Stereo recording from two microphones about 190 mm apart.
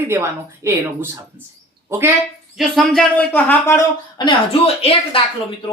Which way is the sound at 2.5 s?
Centre (ahead or behind).